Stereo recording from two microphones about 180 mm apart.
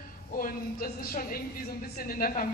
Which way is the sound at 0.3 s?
55° left (ahead or behind).